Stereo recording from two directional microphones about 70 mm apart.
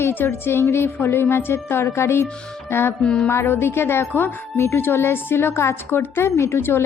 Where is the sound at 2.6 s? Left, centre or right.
Left.